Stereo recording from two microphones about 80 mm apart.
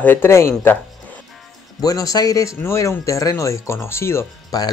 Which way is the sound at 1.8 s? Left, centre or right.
Left.